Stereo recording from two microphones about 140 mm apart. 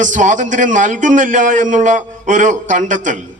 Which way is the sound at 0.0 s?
65° right (ahead or behind).